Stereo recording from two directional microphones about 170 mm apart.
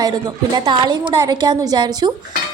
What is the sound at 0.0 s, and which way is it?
A woman's voice, 25° right (ahead or behind).